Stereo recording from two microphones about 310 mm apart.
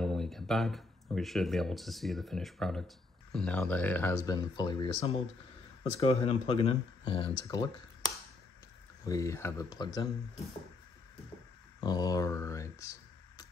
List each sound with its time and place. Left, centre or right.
0.0 s speech: centre
9.0 s speech: centre
11.8 s speech: centre